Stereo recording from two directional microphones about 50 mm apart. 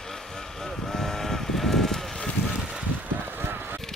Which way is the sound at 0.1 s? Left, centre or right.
Centre.